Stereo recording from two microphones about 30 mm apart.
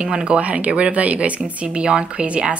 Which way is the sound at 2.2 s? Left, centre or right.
Right.